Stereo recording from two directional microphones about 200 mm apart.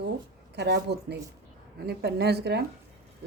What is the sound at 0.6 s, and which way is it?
A woman's voice, 55° right (ahead or behind).